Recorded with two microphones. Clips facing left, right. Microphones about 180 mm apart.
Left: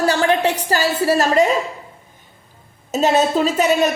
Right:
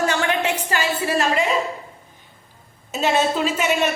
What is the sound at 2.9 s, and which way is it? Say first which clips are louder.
A woman's voice: left 4 dB; 40° left (ahead or behind).